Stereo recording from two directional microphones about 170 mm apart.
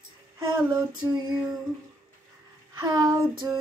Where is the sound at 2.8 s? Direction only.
25° right (ahead or behind).